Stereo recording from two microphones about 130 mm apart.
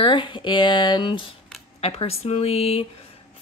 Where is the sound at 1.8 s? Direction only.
50° left (ahead or behind).